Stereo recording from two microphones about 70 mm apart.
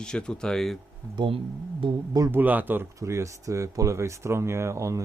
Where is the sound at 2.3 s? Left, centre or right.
Right.